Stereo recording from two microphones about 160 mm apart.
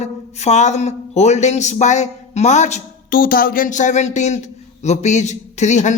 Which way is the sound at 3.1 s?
65° left (ahead or behind).